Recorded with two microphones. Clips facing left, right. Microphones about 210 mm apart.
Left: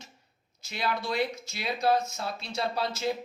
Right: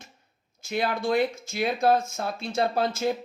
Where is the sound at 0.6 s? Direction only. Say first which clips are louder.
Right 5 dB; 50° right (ahead or behind).